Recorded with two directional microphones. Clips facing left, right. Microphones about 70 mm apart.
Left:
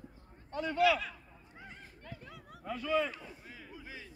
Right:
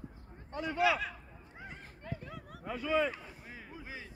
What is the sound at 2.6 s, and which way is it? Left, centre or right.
Speech, centre.